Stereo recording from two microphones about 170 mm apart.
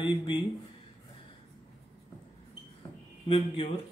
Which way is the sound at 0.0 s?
30° left (ahead or behind).